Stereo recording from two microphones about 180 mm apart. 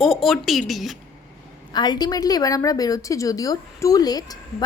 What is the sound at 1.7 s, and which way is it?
A woman's voice, 25° left (ahead or behind).